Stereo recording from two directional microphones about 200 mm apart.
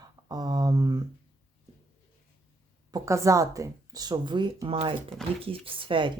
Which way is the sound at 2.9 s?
15° right (ahead or behind).